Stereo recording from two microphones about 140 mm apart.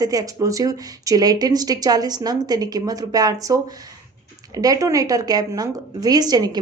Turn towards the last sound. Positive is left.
turn(degrees=-30)  # may be behind; listen again after turning